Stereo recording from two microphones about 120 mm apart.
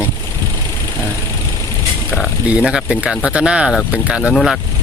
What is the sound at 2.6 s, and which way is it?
Speech, 5° right (ahead or behind).